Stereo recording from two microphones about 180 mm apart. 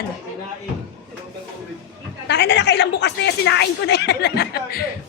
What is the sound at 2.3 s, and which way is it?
A woman's voice, 75° left (ahead or behind).